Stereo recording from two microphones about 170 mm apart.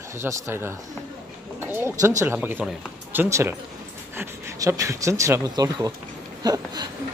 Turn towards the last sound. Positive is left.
turn(degrees=-25)  # may be behind; listen again after turning